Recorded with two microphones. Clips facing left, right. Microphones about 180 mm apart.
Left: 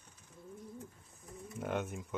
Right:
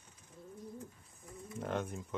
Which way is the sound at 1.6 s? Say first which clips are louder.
Left 1 dB; centre (ahead or behind).